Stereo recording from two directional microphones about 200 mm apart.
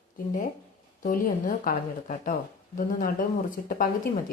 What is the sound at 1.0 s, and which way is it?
A woman's voice, 45° left (ahead or behind).